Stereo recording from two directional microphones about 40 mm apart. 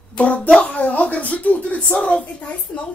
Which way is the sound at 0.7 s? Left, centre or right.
Left.